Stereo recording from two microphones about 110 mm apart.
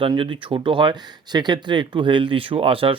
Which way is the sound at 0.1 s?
45° right (ahead or behind).